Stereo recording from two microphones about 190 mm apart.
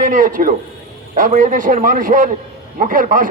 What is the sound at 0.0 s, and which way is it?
A man's voice, 45° right (ahead or behind).